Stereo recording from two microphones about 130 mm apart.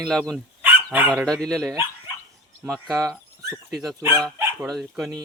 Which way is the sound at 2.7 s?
Centre (ahead or behind).